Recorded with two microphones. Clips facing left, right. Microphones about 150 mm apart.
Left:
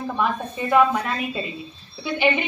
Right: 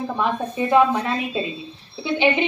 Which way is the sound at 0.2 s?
20° right (ahead or behind).